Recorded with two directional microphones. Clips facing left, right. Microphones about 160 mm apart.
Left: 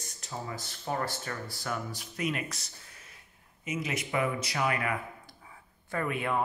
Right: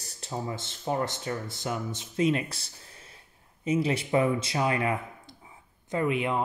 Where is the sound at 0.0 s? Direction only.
30° right (ahead or behind).